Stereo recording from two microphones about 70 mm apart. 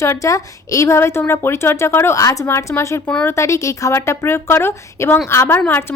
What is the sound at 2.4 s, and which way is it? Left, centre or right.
Speech, left.